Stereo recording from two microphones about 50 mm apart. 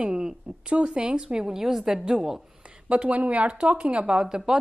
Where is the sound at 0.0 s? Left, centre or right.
Centre.